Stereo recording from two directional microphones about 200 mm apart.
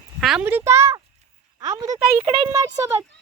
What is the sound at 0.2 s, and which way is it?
Speech, 5° right (ahead or behind).